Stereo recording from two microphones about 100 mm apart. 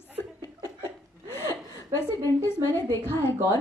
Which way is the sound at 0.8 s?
25° left (ahead or behind).